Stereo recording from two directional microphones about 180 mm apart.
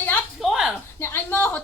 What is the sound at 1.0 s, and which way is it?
Speech, 10° left (ahead or behind).